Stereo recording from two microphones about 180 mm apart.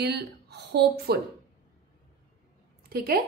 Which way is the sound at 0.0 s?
65° right (ahead or behind).